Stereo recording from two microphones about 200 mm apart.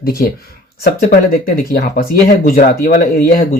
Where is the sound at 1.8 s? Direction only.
50° left (ahead or behind).